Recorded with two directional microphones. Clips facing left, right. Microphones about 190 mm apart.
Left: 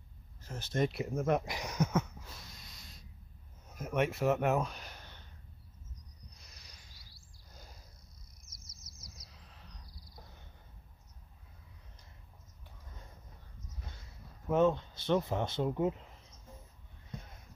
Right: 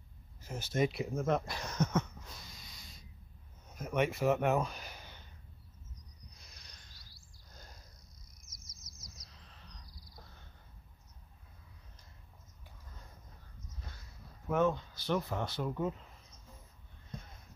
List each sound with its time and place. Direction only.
0.4 s speech: 10° right (ahead or behind)
6.3 s cricket: centre (ahead or behind)
7.5 s a sound: 5° left (ahead or behind)
8.8 s bird vocalization: 55° left (ahead or behind)
9.3 s a sound: 5° left (ahead or behind)
14.5 s speech: 20° left (ahead or behind)